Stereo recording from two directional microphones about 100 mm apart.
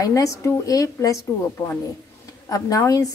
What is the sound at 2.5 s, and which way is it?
Speech, 35° left (ahead or behind).